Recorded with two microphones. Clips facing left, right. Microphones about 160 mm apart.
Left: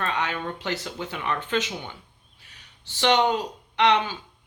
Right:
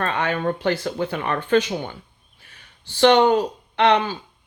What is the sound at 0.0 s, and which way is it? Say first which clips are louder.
Speech: right 6 dB; 50° right (ahead or behind).